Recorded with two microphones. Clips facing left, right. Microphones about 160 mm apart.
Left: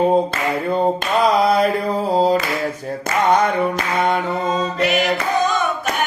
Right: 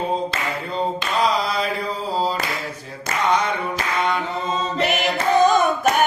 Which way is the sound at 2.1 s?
55° left (ahead or behind).